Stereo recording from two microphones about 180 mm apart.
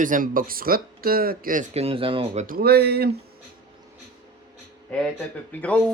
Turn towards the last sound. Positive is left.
turn(degrees=10)  # may be behind; listen again after turning